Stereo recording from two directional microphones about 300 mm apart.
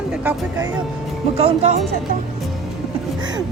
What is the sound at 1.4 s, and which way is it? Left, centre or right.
Speech, right.